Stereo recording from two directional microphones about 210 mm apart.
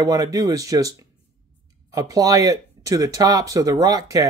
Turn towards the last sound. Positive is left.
turn(degrees=-15)  # may be behind; listen again after turning